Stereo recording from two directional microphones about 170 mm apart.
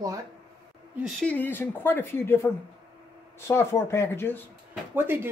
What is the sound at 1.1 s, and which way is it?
Speech, 10° left (ahead or behind).